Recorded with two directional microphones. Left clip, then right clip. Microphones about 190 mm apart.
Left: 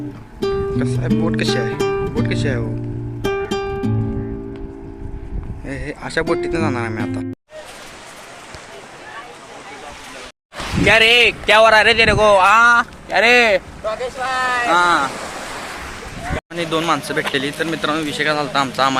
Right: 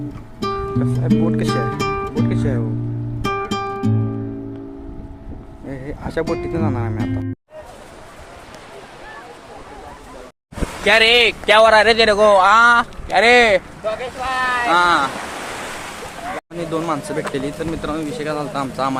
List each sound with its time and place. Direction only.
0.3 s speech: centre (ahead or behind)
3.2 s music: centre (ahead or behind)
5.6 s speech: 5° right (ahead or behind)
10.8 s speech: 5° right (ahead or behind)
13.8 s speech: 40° left (ahead or behind)
14.7 s speech: centre (ahead or behind)
16.6 s speech: centre (ahead or behind)